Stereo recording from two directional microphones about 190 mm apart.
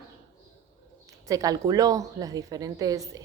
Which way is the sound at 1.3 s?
20° right (ahead or behind).